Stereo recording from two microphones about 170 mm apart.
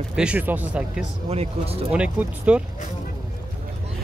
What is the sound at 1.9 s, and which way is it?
Speech, 10° right (ahead or behind).